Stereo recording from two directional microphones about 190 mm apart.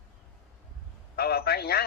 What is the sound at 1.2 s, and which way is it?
Speech, 55° left (ahead or behind).